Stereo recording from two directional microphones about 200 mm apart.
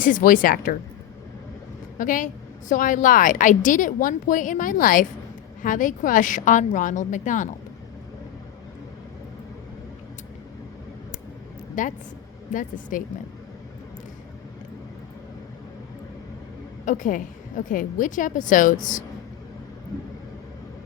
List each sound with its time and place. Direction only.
0.0 s a woman's voice: 40° left (ahead or behind)
2.0 s a woman's voice: 40° left (ahead or behind)
11.7 s a woman's voice: 40° left (ahead or behind)
16.8 s a woman's voice: 40° left (ahead or behind)